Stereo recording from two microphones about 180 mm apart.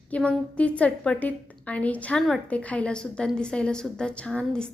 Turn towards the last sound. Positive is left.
turn(degrees=5)  # may be behind; listen again after turning